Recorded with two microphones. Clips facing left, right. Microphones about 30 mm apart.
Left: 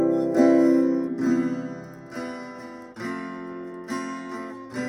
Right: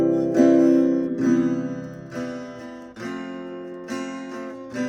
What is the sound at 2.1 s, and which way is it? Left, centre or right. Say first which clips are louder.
Music: right 3 dB; left.